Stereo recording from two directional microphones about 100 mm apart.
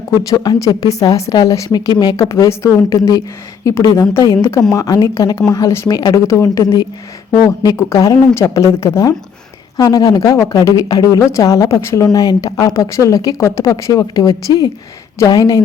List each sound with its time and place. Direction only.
0.1 s a woman's voice: 40° left (ahead or behind)